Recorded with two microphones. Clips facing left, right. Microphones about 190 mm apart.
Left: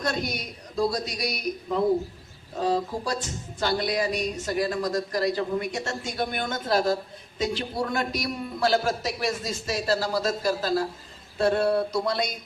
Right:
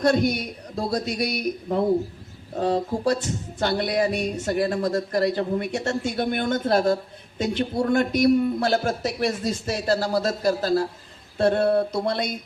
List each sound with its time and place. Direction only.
0.0 s a man's voice: 55° right (ahead or behind)
11.3 s a sound: 55° right (ahead or behind)
12.0 s a man's voice: 55° right (ahead or behind)